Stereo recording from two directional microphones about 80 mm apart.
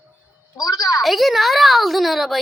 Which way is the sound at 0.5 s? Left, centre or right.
Left.